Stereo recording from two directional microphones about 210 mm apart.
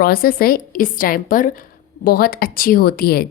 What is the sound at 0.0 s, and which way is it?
A woman's voice, 45° left (ahead or behind).